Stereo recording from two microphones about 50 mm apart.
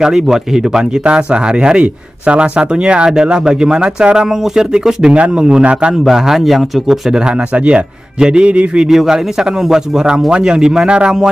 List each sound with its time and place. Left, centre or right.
0.0 s a man's voice: centre
6.0 s speech: centre; by 8.8 s right
8.8 s speech: centre